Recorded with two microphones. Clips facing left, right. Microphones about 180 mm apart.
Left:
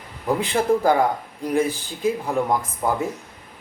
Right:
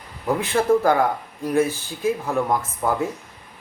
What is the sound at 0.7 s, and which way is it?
Speech, 35° left (ahead or behind).